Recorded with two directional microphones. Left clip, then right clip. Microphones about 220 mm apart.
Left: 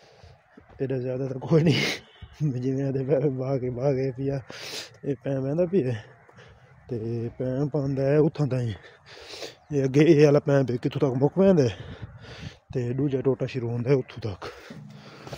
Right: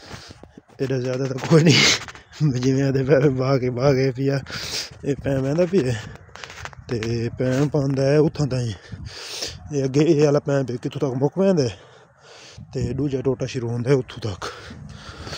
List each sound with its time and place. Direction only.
0.7 s speech: 15° right (ahead or behind); by 11.7 s 5° left (ahead or behind)
12.7 s speech: centre (ahead or behind)